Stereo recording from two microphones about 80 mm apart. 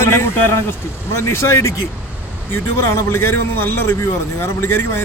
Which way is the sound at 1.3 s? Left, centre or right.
Left.